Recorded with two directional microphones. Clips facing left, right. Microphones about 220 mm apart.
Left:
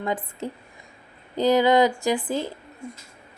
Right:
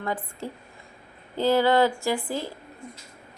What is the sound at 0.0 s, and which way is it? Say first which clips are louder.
A woman's voice: left 3 dB; 20° left (ahead or behind).